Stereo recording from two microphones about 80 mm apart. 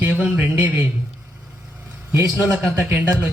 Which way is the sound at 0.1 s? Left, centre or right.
Centre.